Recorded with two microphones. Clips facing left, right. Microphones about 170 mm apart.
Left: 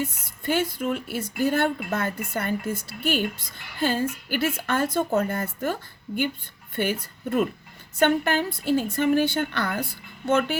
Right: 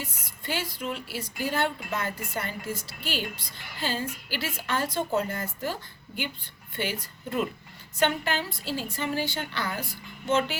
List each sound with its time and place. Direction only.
0.4 s speech: 55° left (ahead or behind)
6.7 s a woman's voice: 50° left (ahead or behind)